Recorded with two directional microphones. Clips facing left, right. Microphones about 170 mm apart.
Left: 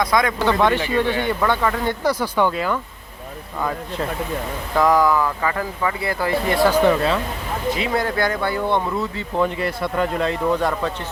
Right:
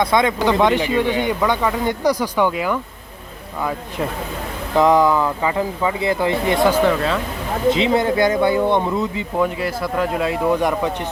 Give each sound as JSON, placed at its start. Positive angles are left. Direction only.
{"t": 0.0, "sound": "speech", "side_deg": -25}
{"t": 4.8, "sound": "speech", "side_deg": -20}
{"t": 9.4, "sound": "speech", "side_deg": 0}